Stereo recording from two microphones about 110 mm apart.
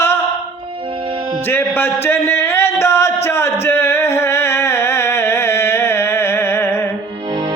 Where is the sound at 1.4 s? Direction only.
20° left (ahead or behind).